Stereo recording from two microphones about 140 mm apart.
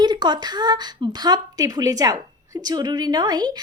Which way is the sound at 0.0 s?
30° right (ahead or behind).